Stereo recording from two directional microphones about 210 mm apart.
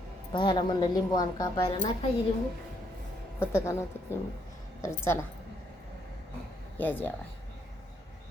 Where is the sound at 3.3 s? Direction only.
10° left (ahead or behind).